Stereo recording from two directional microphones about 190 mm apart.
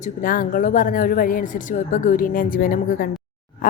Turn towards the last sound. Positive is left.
turn(degrees=50)  # may be behind; listen again after turning